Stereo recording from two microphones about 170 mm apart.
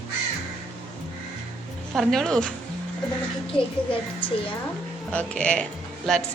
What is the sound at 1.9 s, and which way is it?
Speech, centre (ahead or behind).